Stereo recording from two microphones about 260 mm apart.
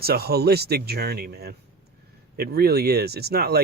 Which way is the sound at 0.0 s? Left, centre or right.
Right.